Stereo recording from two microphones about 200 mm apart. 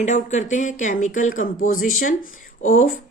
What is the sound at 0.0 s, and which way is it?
A woman's voice, 35° left (ahead or behind).